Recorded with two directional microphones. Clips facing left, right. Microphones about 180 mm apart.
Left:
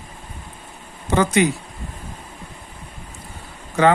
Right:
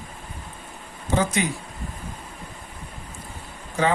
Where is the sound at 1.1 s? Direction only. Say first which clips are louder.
Left 6 dB; 65° left (ahead or behind).